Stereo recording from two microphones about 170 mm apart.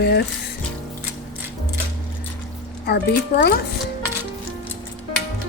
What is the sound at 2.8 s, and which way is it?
Speech, 70° left (ahead or behind).